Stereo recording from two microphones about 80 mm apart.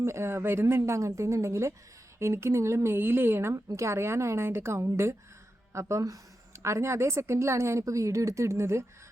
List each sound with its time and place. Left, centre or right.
0.0 s speech: right